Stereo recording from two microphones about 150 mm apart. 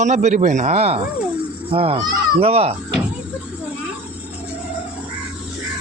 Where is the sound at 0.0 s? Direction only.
50° right (ahead or behind).